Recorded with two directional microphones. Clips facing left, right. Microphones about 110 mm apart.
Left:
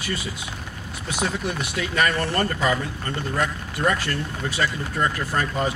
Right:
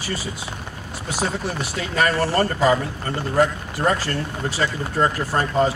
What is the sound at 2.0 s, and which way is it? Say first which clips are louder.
Speech: right 3 dB; 30° right (ahead or behind).